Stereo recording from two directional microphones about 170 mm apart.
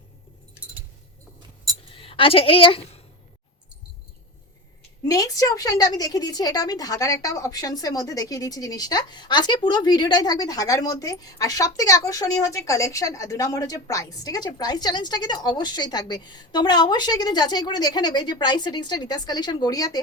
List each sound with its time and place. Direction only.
2.0 s a woman's voice: 30° left (ahead or behind)
5.0 s a woman's voice: 20° left (ahead or behind)